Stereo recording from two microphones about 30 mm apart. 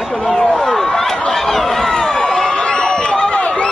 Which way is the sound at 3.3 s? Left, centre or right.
Left.